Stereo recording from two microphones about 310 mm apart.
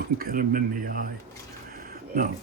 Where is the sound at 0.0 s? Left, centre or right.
Right.